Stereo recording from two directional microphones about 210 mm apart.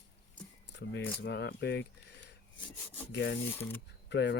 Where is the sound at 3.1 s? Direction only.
60° left (ahead or behind).